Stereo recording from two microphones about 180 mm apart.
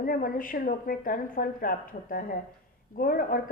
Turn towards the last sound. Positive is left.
turn(degrees=50)  # may be behind; listen again after turning